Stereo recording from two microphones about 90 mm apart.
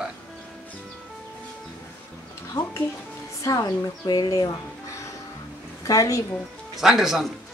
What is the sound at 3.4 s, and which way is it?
A woman's voice, 40° left (ahead or behind).